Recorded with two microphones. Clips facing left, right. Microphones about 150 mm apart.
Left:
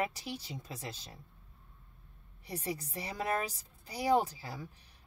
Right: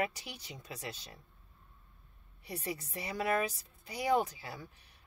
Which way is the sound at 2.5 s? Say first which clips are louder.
Left 1 dB; 35° left (ahead or behind).